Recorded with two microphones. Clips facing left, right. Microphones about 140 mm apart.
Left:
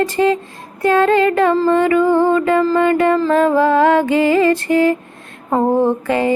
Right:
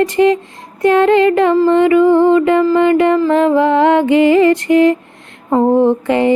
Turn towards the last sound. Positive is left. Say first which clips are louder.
# right 4 dB
turn(degrees=-25)  # may be behind; listen again after turning